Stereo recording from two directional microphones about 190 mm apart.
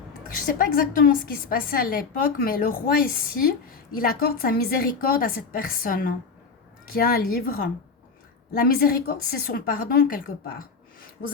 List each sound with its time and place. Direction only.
0.3 s a woman's voice: 50° left (ahead or behind)